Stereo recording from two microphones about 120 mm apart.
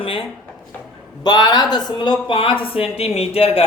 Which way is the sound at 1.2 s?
35° left (ahead or behind).